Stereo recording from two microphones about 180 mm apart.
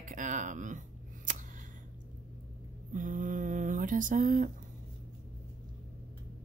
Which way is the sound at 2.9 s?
45° right (ahead or behind).